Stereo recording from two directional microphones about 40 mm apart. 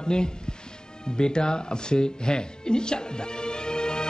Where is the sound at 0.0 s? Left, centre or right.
Left.